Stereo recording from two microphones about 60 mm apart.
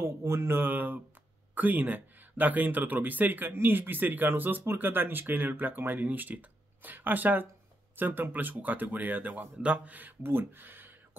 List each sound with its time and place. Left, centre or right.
0.0 s speech: right